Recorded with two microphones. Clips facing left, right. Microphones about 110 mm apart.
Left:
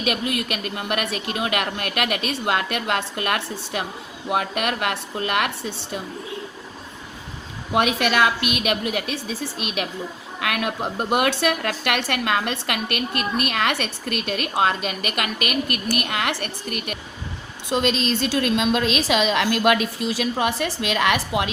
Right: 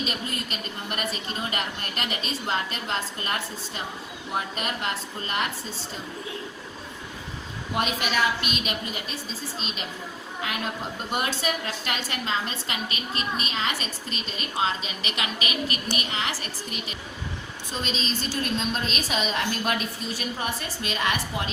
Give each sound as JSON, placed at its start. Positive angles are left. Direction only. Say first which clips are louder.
{"t": 0.0, "sound": "speech", "louder": "left 7 dB", "side_deg": 70}
{"t": 7.7, "sound": "a woman's voice", "louder": "left 7 dB", "side_deg": 80}